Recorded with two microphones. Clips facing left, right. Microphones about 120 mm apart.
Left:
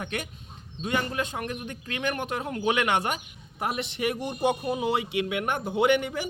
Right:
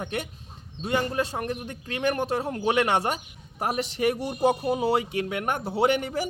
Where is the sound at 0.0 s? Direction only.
30° right (ahead or behind).